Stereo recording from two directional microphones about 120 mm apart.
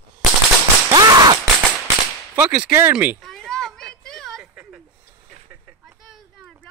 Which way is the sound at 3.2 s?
5° left (ahead or behind).